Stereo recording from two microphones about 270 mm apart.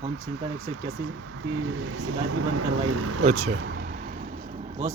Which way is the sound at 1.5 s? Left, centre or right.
Right.